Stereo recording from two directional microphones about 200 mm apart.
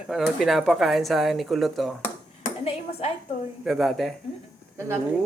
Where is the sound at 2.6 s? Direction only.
30° left (ahead or behind).